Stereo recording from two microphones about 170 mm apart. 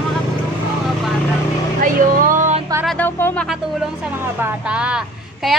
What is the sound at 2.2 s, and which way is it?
Music, 50° right (ahead or behind).